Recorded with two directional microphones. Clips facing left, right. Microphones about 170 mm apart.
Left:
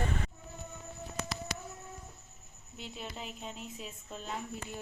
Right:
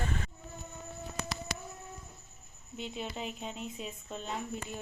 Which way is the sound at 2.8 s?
Centre (ahead or behind).